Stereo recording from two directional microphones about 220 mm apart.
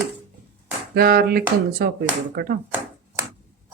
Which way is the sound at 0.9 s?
45° right (ahead or behind).